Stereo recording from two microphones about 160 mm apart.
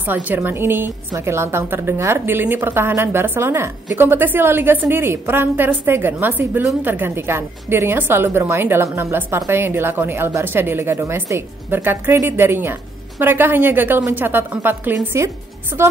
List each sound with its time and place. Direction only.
0.0 s a woman's voice: 10° right (ahead or behind)